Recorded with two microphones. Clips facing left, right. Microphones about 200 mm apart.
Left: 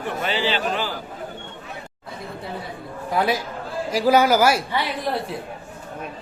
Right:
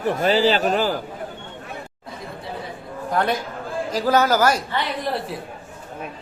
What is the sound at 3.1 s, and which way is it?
A woman's voice, 5° left (ahead or behind).